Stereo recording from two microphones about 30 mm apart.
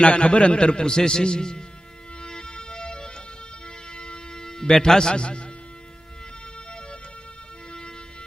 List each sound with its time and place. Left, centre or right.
0.0 s a man's voice: left
0.9 s a man's voice: left
2.2 s music: left
4.9 s a man's voice: left